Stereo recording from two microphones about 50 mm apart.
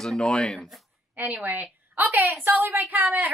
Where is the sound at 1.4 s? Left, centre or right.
Right.